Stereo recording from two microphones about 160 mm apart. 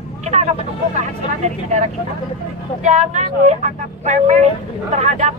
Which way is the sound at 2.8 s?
50° right (ahead or behind).